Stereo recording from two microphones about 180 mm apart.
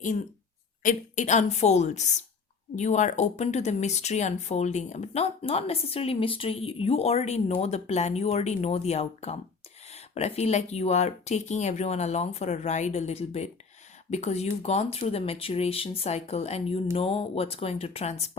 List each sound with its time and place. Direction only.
0.8 s speech: 45° left (ahead or behind)